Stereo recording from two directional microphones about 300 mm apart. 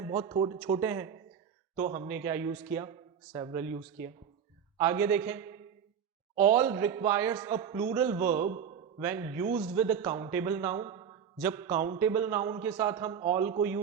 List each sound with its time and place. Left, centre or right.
0.0 s a man's voice: centre
8.4 s a man's voice: right
9.0 s a man's voice: centre